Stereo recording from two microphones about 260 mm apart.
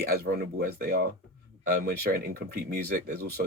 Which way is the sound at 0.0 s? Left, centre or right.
Right.